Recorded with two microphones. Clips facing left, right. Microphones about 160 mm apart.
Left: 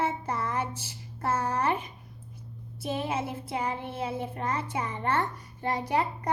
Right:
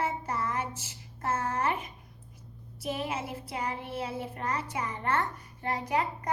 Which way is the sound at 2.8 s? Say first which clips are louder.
Left 3 dB; 25° left (ahead or behind).